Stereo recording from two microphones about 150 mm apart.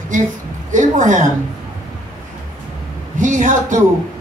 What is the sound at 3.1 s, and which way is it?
Speech, 55° right (ahead or behind).